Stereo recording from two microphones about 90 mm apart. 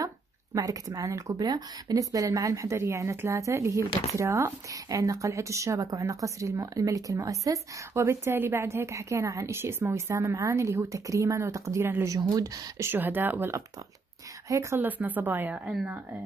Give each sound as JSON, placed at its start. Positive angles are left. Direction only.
{"t": 0.6, "sound": "a woman's voice", "side_deg": -40}
{"t": 12.2, "sound": "speech", "side_deg": -50}
{"t": 12.7, "sound": "a woman's voice", "side_deg": -25}
{"t": 14.8, "sound": "a woman's voice", "side_deg": -20}